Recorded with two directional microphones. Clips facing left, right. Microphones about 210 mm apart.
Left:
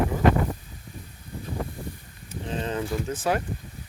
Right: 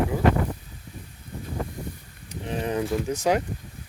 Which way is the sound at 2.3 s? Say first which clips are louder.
Right 2 dB; 15° right (ahead or behind).